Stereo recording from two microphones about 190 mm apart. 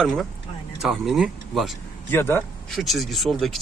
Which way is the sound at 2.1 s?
10° left (ahead or behind).